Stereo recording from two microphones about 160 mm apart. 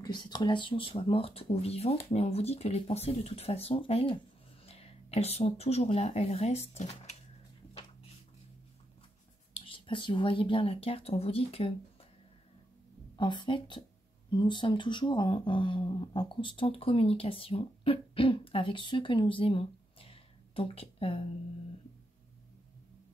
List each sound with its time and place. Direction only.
0.0 s speech: 25° left (ahead or behind); by 7.2 s 45° left (ahead or behind)
9.5 s speech: 35° left (ahead or behind)
13.1 s speech: 30° left (ahead or behind)